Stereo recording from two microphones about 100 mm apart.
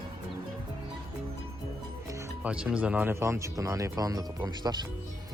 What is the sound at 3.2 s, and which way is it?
Speech, 25° right (ahead or behind).